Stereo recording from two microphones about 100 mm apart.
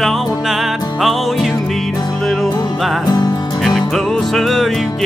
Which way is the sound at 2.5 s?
40° left (ahead or behind).